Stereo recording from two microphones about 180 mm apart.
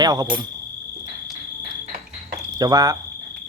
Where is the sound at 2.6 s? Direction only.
20° right (ahead or behind).